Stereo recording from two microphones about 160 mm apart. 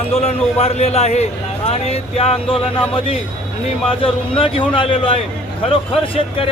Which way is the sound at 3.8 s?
35° left (ahead or behind).